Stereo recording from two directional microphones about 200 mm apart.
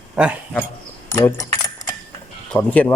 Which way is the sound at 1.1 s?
15° left (ahead or behind).